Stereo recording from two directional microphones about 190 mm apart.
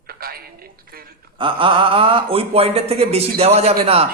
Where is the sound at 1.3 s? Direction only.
25° right (ahead or behind).